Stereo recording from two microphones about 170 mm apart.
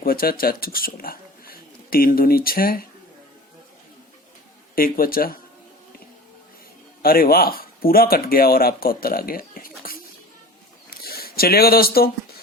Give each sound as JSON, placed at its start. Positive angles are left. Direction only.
{"t": 0.0, "sound": "speech", "side_deg": 60}
{"t": 4.7, "sound": "speech", "side_deg": 60}
{"t": 7.0, "sound": "speech", "side_deg": 60}
{"t": 10.8, "sound": "a sound", "side_deg": 60}